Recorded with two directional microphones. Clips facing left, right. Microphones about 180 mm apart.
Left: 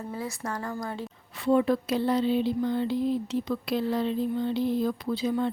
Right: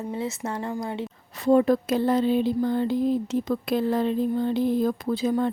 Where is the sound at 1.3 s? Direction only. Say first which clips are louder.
Right 4 dB; 40° right (ahead or behind).